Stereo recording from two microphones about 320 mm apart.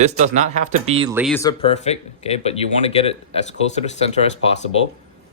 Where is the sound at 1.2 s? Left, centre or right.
Centre.